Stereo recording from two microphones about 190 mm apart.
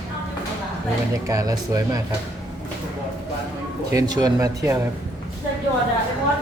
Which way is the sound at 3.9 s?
20° right (ahead or behind).